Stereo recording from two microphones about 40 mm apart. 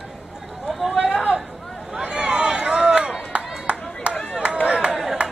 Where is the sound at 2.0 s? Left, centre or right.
Right.